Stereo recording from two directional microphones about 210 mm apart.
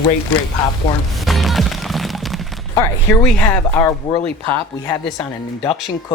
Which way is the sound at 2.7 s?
10° left (ahead or behind).